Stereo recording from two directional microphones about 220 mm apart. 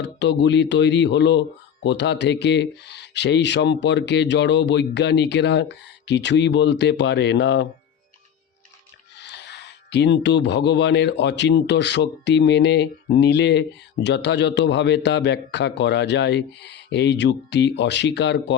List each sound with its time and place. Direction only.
0.0 s speech: 50° left (ahead or behind)
9.1 s speech: 50° left (ahead or behind)